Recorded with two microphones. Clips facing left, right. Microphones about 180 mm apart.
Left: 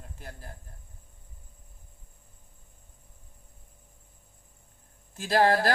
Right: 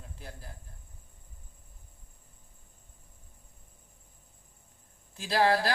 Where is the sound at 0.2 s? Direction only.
50° left (ahead or behind).